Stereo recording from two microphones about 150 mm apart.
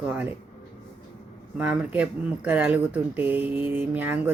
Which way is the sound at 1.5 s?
10° right (ahead or behind).